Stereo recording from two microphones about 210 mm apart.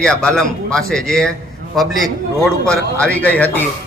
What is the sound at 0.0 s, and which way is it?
A man's voice, 5° left (ahead or behind).